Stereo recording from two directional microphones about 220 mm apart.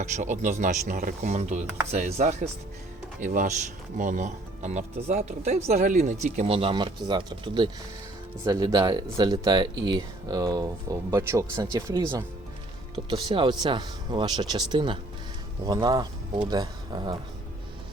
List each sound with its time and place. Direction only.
0.0 s speech: 35° right (ahead or behind); by 12.0 s 15° right (ahead or behind)
13.1 s speech: 20° right (ahead or behind)